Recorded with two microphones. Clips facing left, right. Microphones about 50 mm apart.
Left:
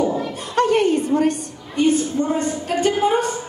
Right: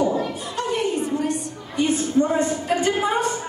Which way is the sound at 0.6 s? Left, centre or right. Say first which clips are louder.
Left 7 dB; left.